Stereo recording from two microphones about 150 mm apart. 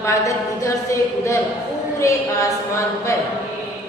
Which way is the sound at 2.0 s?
20° left (ahead or behind).